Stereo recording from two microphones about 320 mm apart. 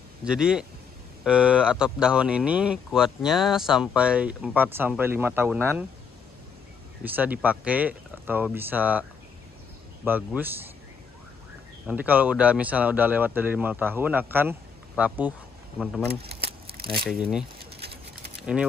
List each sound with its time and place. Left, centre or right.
0.2 s speech: centre
7.1 s speech: centre
10.0 s a man's voice: centre
11.8 s speech: centre
16.4 s a sound: right
17.0 s speech: centre